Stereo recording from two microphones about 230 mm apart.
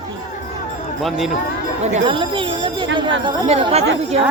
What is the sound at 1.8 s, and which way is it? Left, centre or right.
Speech, right.